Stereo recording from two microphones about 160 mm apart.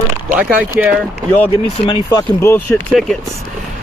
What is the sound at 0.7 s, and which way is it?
Speech, 10° right (ahead or behind).